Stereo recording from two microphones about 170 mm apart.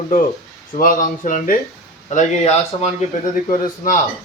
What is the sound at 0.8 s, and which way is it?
A man's voice, 55° left (ahead or behind).